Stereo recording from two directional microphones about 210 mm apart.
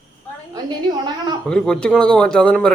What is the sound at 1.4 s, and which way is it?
A man's voice, 5° left (ahead or behind).